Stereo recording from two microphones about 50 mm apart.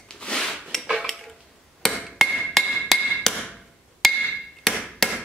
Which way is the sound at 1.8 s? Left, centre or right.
Centre.